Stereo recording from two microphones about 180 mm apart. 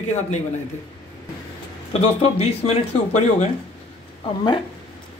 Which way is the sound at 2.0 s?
35° left (ahead or behind).